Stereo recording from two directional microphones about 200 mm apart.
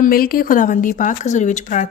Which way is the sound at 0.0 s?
45° left (ahead or behind).